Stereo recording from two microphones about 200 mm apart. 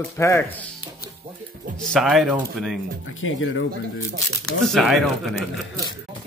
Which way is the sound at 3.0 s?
80° left.